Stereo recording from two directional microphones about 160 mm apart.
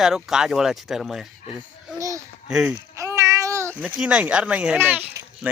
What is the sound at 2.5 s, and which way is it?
Speech, 5° right (ahead or behind).